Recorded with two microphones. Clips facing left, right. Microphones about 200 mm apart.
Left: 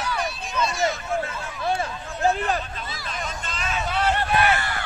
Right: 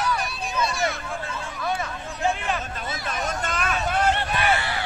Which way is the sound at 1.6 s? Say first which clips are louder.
Left 3 dB; 30° left (ahead or behind).